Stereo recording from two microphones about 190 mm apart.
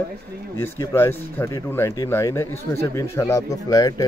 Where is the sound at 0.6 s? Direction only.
15° left (ahead or behind).